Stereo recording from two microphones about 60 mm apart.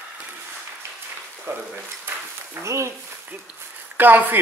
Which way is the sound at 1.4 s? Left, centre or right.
Right.